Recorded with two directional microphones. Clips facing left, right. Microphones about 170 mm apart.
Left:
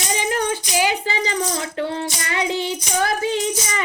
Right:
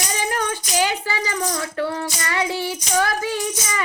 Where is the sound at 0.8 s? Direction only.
15° left (ahead or behind).